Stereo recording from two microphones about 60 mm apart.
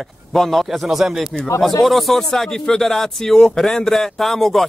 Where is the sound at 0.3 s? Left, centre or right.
Centre.